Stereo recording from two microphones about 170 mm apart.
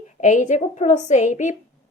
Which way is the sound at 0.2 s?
45° left (ahead or behind).